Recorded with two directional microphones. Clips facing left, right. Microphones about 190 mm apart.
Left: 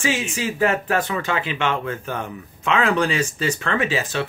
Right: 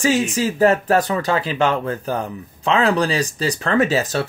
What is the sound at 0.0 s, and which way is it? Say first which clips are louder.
Speech: right 6 dB; 40° right (ahead or behind).